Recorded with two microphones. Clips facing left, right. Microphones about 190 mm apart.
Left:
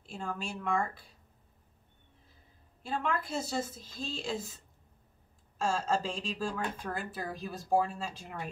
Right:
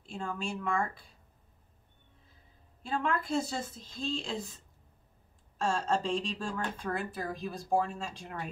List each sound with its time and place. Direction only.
0.0 s speech: centre (ahead or behind)
2.8 s speech: centre (ahead or behind)
5.6 s speech: centre (ahead or behind)